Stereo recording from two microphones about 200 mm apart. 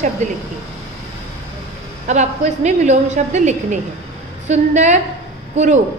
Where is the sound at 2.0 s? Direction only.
35° right (ahead or behind).